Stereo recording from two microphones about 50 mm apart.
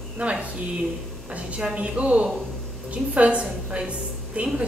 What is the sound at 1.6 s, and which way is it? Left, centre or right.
A woman's voice, right.